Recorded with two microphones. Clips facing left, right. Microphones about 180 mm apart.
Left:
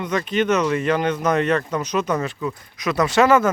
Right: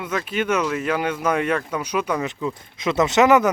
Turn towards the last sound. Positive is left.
turn(degrees=-15)  # may be behind; listen again after turning